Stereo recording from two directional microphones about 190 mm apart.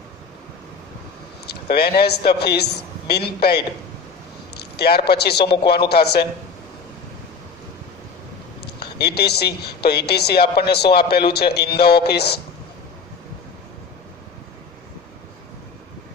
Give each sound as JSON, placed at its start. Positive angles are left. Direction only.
{"t": 1.4, "sound": "a man's voice", "side_deg": 55}
{"t": 8.7, "sound": "speech", "side_deg": 60}